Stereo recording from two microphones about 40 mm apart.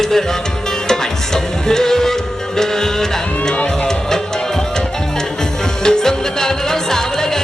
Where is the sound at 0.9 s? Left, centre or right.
Centre.